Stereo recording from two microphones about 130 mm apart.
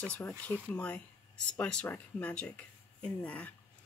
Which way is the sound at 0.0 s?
15° left (ahead or behind).